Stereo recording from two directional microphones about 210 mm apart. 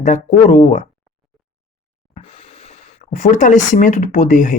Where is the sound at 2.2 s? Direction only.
25° left (ahead or behind).